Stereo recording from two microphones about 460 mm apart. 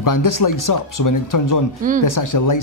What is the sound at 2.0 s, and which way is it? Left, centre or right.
Speech, left.